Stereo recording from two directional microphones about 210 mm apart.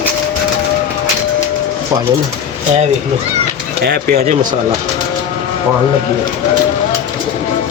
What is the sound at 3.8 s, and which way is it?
Speech, 50° right (ahead or behind).